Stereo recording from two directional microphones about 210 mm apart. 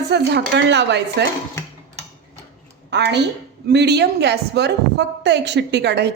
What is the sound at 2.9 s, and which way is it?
A woman's voice, 55° right (ahead or behind).